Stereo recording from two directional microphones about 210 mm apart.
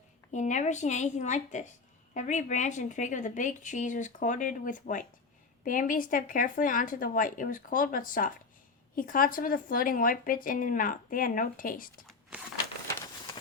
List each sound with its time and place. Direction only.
0.3 s speech: 35° left (ahead or behind)